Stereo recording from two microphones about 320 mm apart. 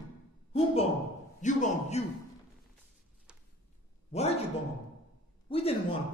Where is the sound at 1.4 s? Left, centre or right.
Left.